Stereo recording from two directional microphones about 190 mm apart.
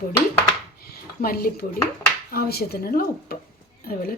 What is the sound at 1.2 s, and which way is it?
A woman's voice, 50° left (ahead or behind).